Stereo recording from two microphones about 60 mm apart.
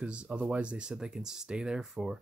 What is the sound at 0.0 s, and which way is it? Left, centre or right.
Speech, centre.